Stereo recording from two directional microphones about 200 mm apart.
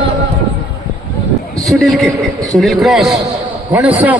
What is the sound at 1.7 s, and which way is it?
A man's voice, centre (ahead or behind).